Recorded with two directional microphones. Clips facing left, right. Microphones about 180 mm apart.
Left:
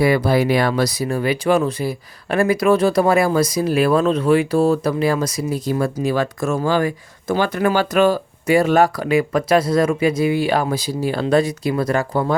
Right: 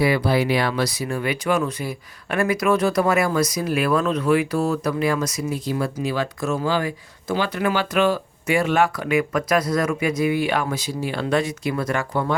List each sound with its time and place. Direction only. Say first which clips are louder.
0.0 s speech: left 3 dB; 45° left (ahead or behind)